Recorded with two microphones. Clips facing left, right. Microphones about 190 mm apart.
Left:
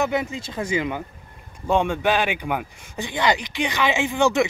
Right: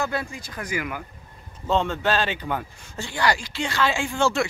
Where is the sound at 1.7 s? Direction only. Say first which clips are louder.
Left 2 dB; 15° left (ahead or behind).